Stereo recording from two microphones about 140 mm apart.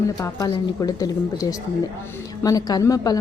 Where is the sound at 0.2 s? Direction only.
25° left (ahead or behind).